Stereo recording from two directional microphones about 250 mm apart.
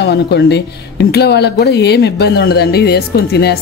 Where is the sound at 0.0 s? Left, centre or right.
Left.